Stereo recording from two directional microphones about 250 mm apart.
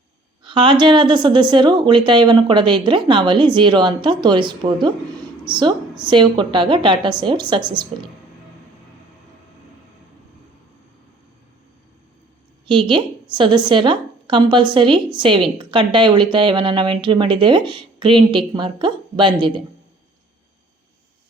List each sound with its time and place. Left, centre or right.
0.4 s speech: centre
12.6 s a woman's voice: centre